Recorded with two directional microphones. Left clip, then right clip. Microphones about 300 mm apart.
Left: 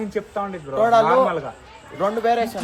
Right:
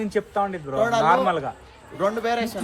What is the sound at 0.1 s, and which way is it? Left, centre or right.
Speech, right.